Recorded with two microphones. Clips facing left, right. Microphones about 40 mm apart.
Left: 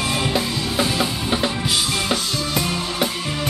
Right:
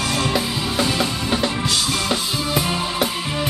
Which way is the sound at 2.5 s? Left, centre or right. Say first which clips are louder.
Right 2 dB; centre.